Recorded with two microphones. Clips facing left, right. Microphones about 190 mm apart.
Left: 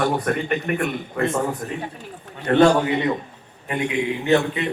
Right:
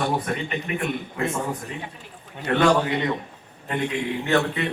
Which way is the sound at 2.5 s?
45° left (ahead or behind).